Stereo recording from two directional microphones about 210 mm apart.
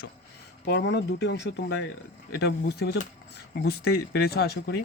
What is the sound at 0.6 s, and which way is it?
Speech, 60° left (ahead or behind).